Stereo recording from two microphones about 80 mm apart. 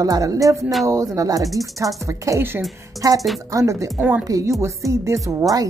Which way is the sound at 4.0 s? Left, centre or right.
Centre.